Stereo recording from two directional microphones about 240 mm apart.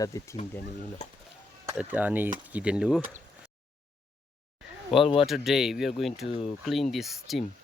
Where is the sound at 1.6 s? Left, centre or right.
Centre.